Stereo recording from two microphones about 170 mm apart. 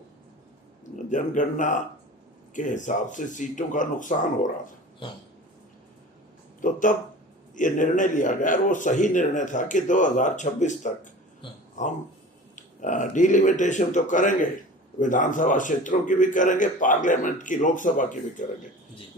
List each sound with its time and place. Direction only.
1.1 s a man's voice: 50° left (ahead or behind)
6.6 s a man's voice: 50° left (ahead or behind)
11.4 s a sound: 30° left (ahead or behind)
12.5 s a man's voice: 50° left (ahead or behind)